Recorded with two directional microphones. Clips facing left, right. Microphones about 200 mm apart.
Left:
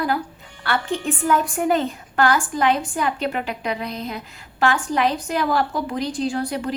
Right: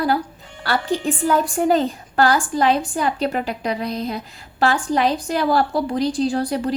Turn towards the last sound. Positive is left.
turn(degrees=-35)  # may be behind; listen again after turning